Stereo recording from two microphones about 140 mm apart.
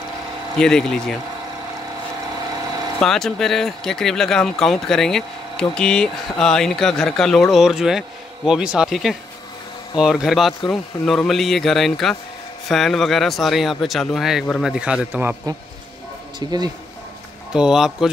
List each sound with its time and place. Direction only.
0.6 s speech: 5° left (ahead or behind)
3.0 s a man's voice: 5° left (ahead or behind)
16.3 s speech: 30° right (ahead or behind)
17.5 s speech: 5° right (ahead or behind)